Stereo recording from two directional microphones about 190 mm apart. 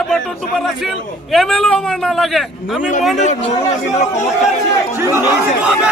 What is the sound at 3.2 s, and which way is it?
Speech, 40° left (ahead or behind).